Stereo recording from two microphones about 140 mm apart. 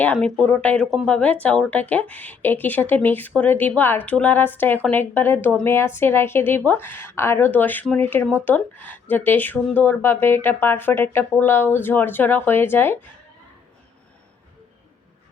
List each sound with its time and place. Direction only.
0.0 s speech: 10° left (ahead or behind)